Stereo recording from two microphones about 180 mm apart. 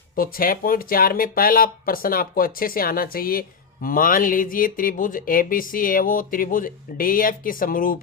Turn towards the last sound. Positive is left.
turn(degrees=50)  # may be behind; listen again after turning